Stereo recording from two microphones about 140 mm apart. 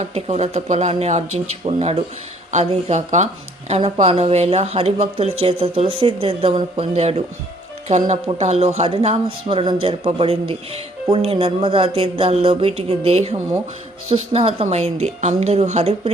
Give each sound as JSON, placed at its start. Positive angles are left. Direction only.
{"t": 0.0, "sound": "speech", "side_deg": -50}